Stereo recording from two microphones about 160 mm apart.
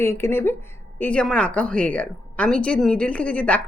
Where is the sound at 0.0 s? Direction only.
15° left (ahead or behind).